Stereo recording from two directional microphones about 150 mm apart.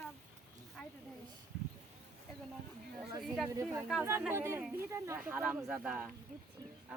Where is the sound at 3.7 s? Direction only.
10° right (ahead or behind).